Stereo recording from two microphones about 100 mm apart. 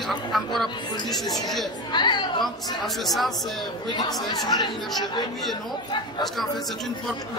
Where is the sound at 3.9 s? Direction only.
40° left (ahead or behind).